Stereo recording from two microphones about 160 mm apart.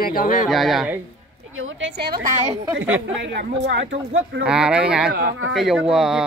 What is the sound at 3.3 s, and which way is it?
Speech, 90° right.